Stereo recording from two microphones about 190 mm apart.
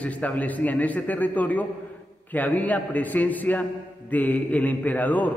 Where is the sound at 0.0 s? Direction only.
10° left (ahead or behind).